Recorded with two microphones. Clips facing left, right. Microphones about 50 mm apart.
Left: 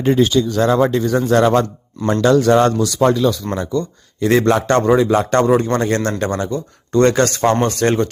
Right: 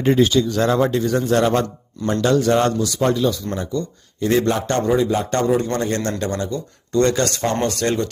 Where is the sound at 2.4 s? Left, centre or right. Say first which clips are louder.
Left 4 dB; left.